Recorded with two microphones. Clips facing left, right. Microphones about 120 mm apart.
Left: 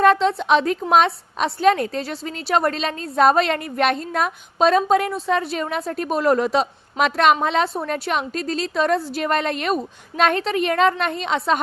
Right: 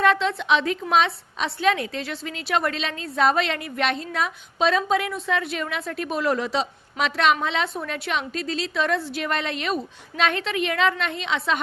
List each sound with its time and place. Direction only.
0.0 s a woman's voice: 40° left (ahead or behind)